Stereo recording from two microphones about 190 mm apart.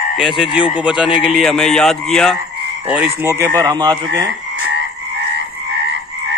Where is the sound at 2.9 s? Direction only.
10° right (ahead or behind).